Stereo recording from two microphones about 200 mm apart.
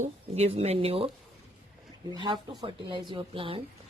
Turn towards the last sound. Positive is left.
turn(degrees=-25)  # may be behind; listen again after turning